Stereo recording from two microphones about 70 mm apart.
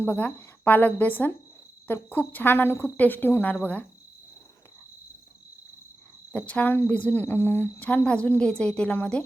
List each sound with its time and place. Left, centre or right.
0.0 s a woman's voice: left
6.3 s a woman's voice: centre